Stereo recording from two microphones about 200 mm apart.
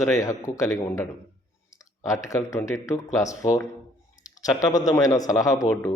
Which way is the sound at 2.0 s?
15° left (ahead or behind).